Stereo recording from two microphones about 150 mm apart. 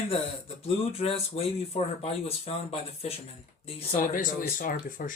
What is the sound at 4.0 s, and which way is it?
Speech, 65° left (ahead or behind).